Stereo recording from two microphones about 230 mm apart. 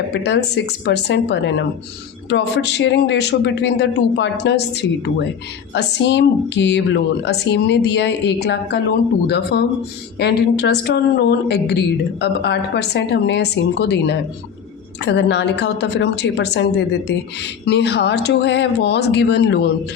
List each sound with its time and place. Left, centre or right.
0.1 s a woman's voice: left